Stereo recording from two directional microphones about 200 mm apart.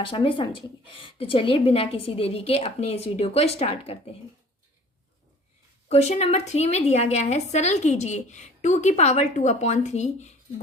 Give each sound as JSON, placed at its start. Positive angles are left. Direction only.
{"t": 0.0, "sound": "a woman's voice", "side_deg": 25}
{"t": 5.9, "sound": "a woman's voice", "side_deg": 30}